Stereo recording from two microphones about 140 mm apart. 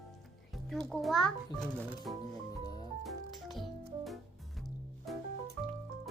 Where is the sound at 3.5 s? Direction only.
Centre (ahead or behind).